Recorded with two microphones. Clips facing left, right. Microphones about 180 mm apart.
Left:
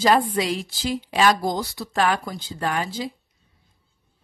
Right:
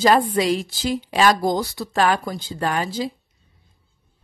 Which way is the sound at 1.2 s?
40° right (ahead or behind).